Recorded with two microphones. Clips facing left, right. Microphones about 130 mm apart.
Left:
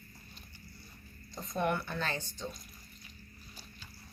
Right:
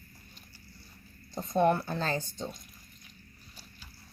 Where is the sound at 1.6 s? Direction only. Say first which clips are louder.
Right 7 dB; 35° right (ahead or behind).